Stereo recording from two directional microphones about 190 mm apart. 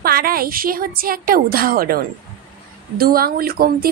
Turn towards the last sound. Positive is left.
turn(degrees=-50)  # may be behind; listen again after turning